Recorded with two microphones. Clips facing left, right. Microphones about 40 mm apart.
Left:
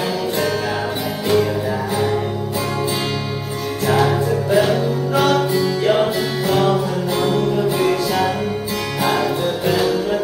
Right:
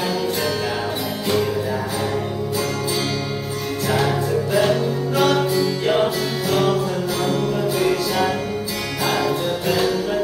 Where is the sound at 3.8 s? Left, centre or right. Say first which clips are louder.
Left 4 dB; centre.